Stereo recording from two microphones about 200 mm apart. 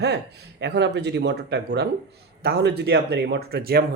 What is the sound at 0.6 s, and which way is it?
Speech, 55° right (ahead or behind).